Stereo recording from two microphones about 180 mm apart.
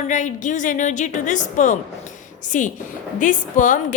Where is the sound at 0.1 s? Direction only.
45° left (ahead or behind).